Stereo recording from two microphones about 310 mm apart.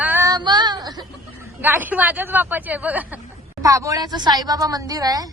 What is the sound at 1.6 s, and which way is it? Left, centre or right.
A woman's voice, centre.